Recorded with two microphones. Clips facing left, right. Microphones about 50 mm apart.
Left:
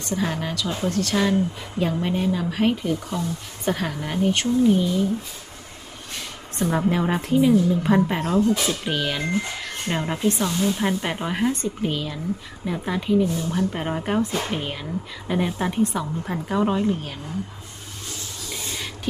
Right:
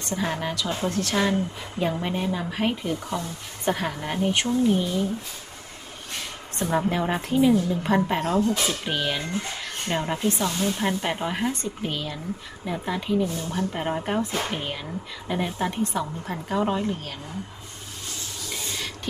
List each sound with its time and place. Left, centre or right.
0.1 s speech: centre
0.8 s a woman's voice: right
1.1 s speech: centre
6.6 s speech: centre